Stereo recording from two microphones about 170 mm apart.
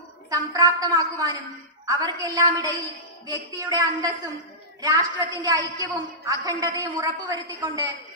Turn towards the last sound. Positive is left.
turn(degrees=-20)  # may be behind; listen again after turning